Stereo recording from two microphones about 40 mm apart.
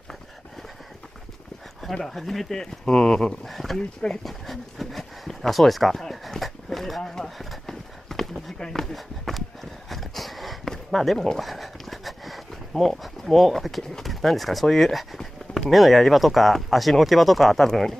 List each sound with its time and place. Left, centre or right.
2.0 s speech: centre
3.4 s speech: centre
4.2 s a sound: centre
7.1 s speech: centre
7.6 s clip-clop: centre
8.5 s speech: centre
8.9 s a sound: centre
12.9 s speech: centre
14.0 s a sound: centre
15.7 s speech: centre